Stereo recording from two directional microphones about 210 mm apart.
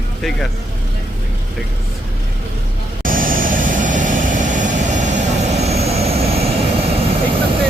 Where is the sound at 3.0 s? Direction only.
40° right (ahead or behind).